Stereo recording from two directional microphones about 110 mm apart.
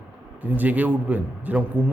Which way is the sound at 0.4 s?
15° right (ahead or behind).